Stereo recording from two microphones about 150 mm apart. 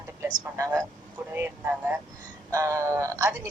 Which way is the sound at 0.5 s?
20° right (ahead or behind).